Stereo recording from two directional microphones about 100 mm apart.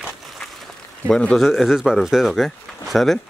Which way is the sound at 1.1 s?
5° left (ahead or behind).